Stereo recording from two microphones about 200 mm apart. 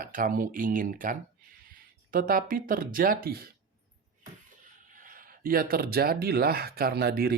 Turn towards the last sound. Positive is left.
turn(degrees=-50)  # may be behind; listen again after turning